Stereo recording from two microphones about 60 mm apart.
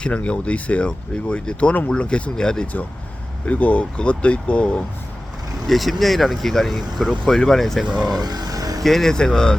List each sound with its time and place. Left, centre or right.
0.0 s speech: left
3.4 s speech: left
5.6 s speech: centre
8.2 s music: right
8.8 s speech: centre